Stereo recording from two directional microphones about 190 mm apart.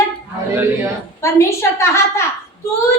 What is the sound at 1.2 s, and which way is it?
A woman's voice, 15° left (ahead or behind).